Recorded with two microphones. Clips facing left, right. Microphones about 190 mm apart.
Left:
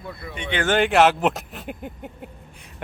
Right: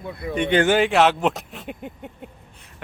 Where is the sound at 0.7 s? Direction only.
Centre (ahead or behind).